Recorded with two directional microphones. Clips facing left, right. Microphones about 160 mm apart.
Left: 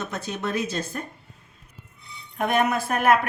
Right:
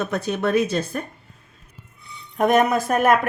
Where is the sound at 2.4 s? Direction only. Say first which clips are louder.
Right 5 dB; 40° right (ahead or behind).